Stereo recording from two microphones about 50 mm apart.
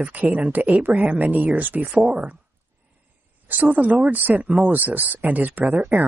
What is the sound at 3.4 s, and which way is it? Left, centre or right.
Speech, right.